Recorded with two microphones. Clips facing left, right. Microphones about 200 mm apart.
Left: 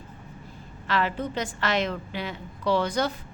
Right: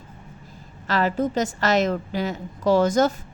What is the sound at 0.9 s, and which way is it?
A woman's voice, 40° right (ahead or behind).